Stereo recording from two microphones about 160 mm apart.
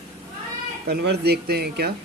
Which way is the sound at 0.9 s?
85° right.